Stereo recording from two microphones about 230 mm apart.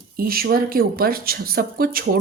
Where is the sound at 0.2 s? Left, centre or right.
Right.